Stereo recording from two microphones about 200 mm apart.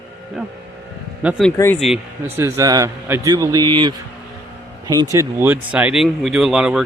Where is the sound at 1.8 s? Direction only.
5° right (ahead or behind); by 3.9 s 25° right (ahead or behind).